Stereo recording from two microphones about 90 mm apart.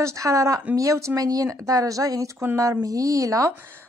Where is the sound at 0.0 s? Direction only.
35° right (ahead or behind).